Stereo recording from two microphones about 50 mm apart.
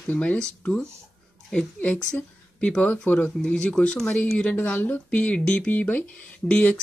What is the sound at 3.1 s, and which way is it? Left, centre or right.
Speech, left.